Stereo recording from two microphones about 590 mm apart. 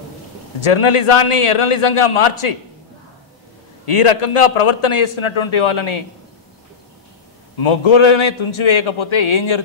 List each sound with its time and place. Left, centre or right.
0.6 s a man's voice: left
3.8 s a man's voice: left
7.5 s a man's voice: left